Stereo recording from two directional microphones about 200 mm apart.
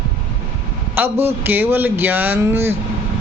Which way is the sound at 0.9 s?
10° right (ahead or behind).